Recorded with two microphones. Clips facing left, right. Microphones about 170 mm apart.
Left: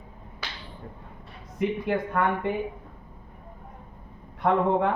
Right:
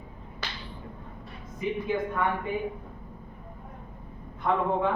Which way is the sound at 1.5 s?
70° left (ahead or behind).